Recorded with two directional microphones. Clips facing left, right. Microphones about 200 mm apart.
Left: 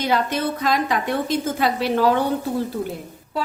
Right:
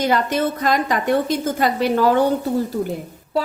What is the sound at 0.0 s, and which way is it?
A woman's voice, 45° right (ahead or behind).